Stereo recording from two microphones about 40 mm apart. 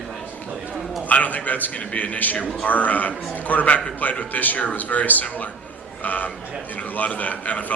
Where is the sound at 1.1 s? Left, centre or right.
Left.